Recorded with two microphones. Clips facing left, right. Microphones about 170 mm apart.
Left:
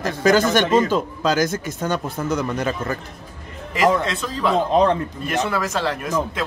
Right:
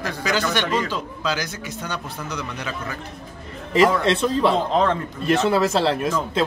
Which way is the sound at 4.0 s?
30° right (ahead or behind).